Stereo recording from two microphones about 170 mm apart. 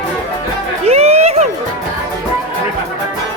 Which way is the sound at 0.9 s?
40° right (ahead or behind).